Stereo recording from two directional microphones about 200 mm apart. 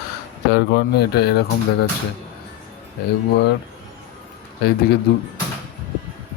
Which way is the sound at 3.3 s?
55° left (ahead or behind).